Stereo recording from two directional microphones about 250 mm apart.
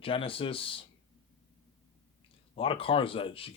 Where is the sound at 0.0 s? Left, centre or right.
Left.